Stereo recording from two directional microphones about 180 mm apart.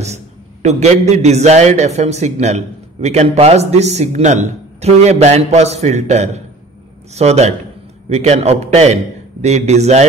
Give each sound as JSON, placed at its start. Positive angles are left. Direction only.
{"t": 0.0, "sound": "a man's voice", "side_deg": -40}